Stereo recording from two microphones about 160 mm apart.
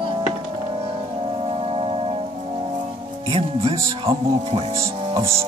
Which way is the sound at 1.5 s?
35° right (ahead or behind).